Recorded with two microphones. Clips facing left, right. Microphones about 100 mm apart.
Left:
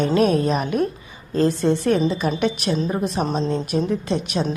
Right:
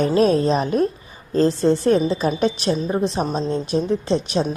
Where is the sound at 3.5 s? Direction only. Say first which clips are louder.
Right 1 dB; 30° right (ahead or behind).